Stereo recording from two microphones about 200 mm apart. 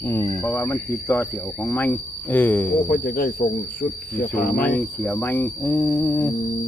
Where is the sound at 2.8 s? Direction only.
45° left (ahead or behind).